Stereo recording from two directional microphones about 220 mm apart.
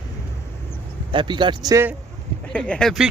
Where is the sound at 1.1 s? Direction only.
20° right (ahead or behind).